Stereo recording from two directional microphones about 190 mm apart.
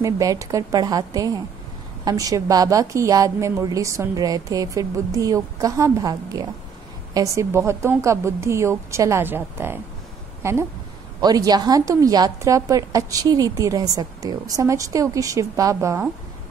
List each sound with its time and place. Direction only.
0.0 s a woman's voice: 15° right (ahead or behind)